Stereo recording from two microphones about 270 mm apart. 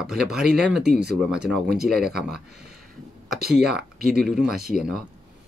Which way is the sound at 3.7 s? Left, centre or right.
Centre.